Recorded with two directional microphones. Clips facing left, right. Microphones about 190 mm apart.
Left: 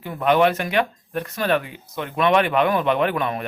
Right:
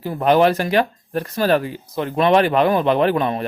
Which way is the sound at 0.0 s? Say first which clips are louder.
Right 3 dB; 35° right (ahead or behind).